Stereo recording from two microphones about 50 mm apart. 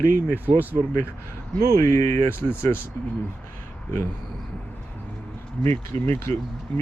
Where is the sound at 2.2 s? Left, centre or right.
Left.